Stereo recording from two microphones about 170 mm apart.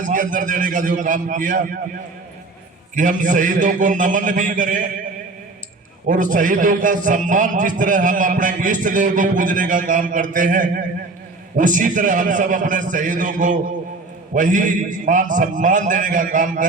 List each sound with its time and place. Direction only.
0.0 s a man's voice: 50° right (ahead or behind)
2.9 s a man's voice: 50° right (ahead or behind)
6.1 s a man's voice: 50° right (ahead or behind)